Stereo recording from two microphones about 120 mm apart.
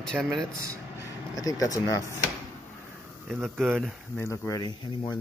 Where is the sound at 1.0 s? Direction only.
30° left (ahead or behind).